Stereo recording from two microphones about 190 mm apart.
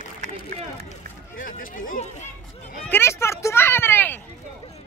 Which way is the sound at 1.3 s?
45° left (ahead or behind).